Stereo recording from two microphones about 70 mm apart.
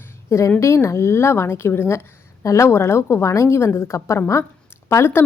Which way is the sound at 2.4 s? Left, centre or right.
Left.